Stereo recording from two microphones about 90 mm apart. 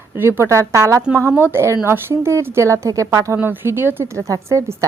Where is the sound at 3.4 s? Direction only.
25° right (ahead or behind).